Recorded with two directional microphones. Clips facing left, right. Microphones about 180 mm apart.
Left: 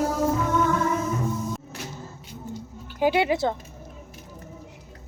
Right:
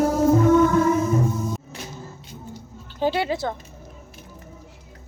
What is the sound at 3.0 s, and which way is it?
Speech, 15° left (ahead or behind).